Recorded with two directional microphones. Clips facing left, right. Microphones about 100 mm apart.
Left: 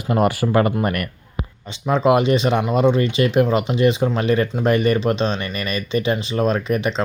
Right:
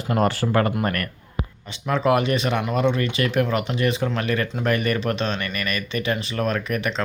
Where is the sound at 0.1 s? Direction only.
10° left (ahead or behind).